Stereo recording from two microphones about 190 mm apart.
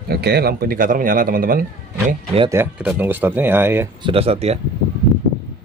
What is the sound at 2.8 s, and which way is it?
Speech, 5° right (ahead or behind).